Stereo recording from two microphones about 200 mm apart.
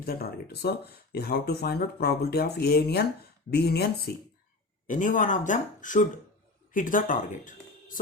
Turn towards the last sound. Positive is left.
turn(degrees=40)  # may be behind; listen again after turning